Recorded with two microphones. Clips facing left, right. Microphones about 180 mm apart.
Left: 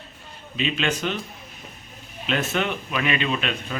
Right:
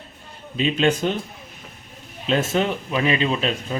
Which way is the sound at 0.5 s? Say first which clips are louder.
Right 6 dB; 35° right (ahead or behind).